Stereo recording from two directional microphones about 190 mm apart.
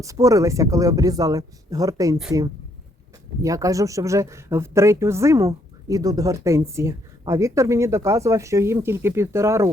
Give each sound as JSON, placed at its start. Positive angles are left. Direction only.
{"t": 0.0, "sound": "speech", "side_deg": -15}
{"t": 3.4, "sound": "speech", "side_deg": -15}